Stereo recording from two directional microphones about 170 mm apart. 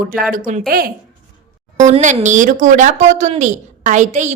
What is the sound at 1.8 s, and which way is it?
A woman's voice, 45° right (ahead or behind).